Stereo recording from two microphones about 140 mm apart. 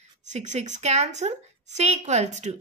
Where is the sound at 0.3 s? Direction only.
55° right (ahead or behind).